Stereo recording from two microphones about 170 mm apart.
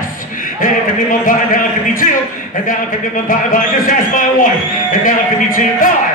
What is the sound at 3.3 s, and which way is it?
A man's voice, 55° left (ahead or behind).